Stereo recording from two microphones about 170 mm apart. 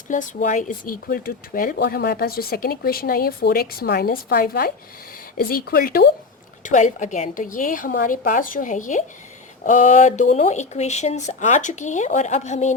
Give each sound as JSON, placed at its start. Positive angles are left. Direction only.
{"t": 0.1, "sound": "speech", "side_deg": 45}
{"t": 1.0, "sound": "speech", "side_deg": 60}
{"t": 6.6, "sound": "speech", "side_deg": 45}